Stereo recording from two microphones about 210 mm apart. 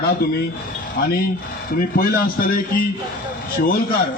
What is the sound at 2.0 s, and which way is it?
Speech, 45° left (ahead or behind).